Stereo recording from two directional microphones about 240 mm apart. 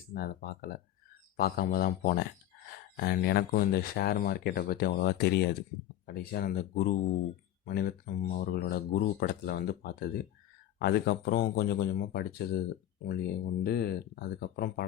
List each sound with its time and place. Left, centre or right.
0.1 s speech: left